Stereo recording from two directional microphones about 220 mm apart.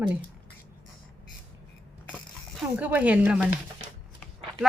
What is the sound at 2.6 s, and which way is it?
Speech, 5° right (ahead or behind).